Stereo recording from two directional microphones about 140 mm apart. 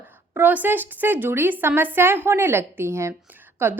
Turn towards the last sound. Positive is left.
turn(degrees=-15)  # may be behind; listen again after turning